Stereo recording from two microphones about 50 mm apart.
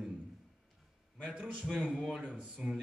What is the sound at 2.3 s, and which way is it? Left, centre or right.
Speech, centre.